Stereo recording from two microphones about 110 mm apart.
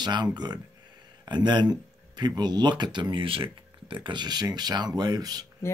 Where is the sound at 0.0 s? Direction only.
40° right (ahead or behind).